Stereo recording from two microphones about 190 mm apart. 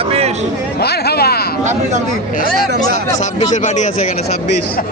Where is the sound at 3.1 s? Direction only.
40° left (ahead or behind).